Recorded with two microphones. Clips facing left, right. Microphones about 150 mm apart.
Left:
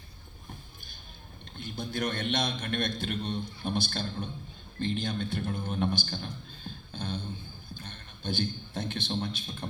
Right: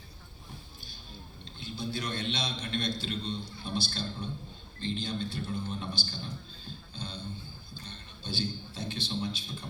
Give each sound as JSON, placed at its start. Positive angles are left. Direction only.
{"t": 1.5, "sound": "a man's voice", "side_deg": 50}